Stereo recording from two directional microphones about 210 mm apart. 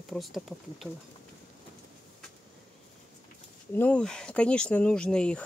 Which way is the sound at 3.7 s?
5° left (ahead or behind).